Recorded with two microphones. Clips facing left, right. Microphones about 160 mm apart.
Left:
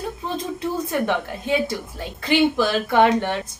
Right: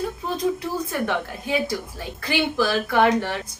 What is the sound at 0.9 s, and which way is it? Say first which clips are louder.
A woman's voice: left 3 dB; 20° left (ahead or behind).